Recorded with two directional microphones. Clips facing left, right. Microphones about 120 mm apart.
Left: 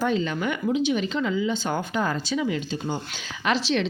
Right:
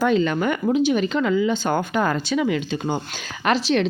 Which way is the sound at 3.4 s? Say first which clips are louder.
Right 4 dB; 50° right (ahead or behind).